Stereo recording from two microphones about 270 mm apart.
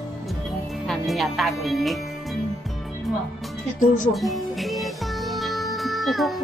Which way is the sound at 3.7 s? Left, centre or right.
Left.